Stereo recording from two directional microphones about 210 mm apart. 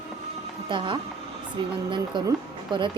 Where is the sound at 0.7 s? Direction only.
20° right (ahead or behind).